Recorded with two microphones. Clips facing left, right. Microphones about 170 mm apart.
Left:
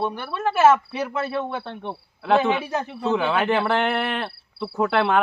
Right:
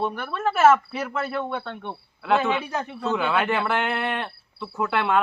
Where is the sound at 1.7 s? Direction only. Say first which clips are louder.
Left 2 dB; 35° left (ahead or behind).